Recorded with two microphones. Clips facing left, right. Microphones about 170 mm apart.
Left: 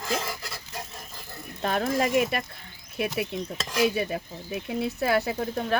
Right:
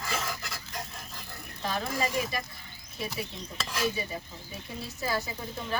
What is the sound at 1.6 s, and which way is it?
Speech, 60° left (ahead or behind).